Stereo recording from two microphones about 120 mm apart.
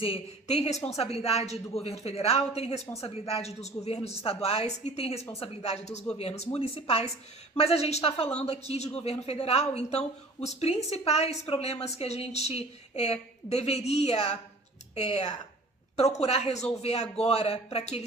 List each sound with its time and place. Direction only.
0.0 s a woman's voice: 60° left (ahead or behind)